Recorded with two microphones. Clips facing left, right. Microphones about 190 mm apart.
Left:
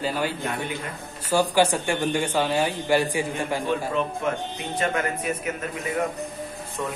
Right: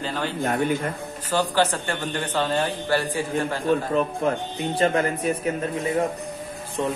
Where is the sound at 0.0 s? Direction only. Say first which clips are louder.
Left 2 dB; 10° left (ahead or behind).